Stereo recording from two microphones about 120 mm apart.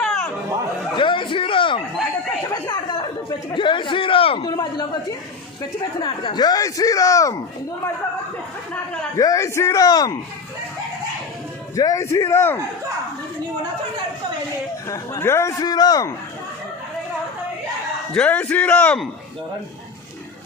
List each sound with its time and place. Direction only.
0.9 s a man's voice: 45° left (ahead or behind)
2.5 s speech: 35° left (ahead or behind); by 4.4 s 50° left (ahead or behind)
4.4 s a man's voice: 35° left (ahead or behind)
6.0 s a woman's voice: 50° left (ahead or behind)
6.4 s a man's voice: 30° left (ahead or behind)
8.7 s speech: 10° left (ahead or behind)
9.1 s a man's voice: 25° left (ahead or behind)
11.7 s a man's voice: 30° left (ahead or behind)
14.8 s a man's voice: 25° left (ahead or behind)
18.1 s speech: 10° left (ahead or behind)